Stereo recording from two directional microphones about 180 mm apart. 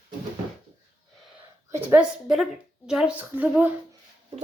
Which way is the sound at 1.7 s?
10° right (ahead or behind).